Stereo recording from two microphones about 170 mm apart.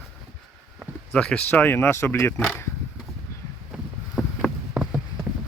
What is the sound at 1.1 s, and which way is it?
Speech, 5° left (ahead or behind).